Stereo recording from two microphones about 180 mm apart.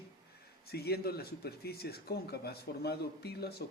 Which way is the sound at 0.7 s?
60° left (ahead or behind).